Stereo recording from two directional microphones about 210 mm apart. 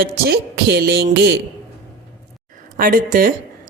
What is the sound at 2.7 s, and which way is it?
Speech, 40° right (ahead or behind).